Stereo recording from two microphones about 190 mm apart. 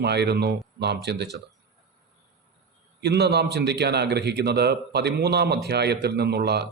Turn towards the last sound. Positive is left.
turn(degrees=-60)  # may be behind; listen again after turning